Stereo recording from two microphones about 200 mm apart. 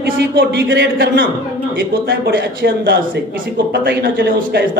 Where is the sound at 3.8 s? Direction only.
55° right (ahead or behind).